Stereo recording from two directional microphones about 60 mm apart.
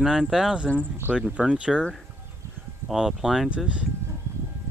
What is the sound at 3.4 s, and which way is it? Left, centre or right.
Speech, right.